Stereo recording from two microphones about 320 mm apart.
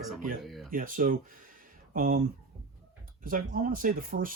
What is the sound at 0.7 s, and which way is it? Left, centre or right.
Speech, right.